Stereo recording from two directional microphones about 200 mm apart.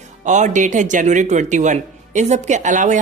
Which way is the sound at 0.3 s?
35° right (ahead or behind).